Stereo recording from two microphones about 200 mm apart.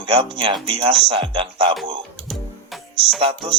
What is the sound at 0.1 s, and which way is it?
Speech, 25° right (ahead or behind).